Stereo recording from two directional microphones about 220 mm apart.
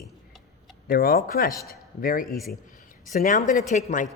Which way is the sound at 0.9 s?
40° left (ahead or behind).